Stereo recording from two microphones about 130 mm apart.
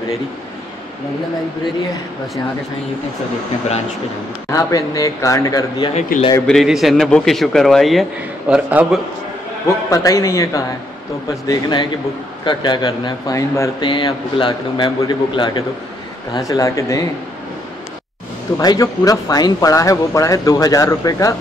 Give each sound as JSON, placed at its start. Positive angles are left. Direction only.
{"t": 4.5, "sound": "speech", "side_deg": 25}
{"t": 6.1, "sound": "speech", "side_deg": 90}
{"t": 6.4, "sound": "a man's voice", "side_deg": 0}
{"t": 8.5, "sound": "a man's voice", "side_deg": -15}
{"t": 9.7, "sound": "speech", "side_deg": 25}
{"t": 11.4, "sound": "a man's voice", "side_deg": 35}
{"t": 16.3, "sound": "speech", "side_deg": 25}
{"t": 18.6, "sound": "speech", "side_deg": 30}